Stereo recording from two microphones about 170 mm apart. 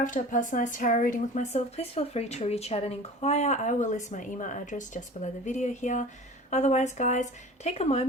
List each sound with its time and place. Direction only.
0.0 s speech: 50° left (ahead or behind)